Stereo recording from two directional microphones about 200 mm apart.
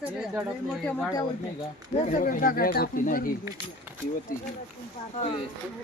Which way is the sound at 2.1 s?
45° left (ahead or behind).